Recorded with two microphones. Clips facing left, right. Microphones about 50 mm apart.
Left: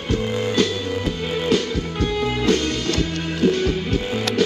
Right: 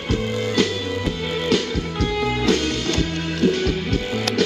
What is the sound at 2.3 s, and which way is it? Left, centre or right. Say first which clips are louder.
Music: even; right.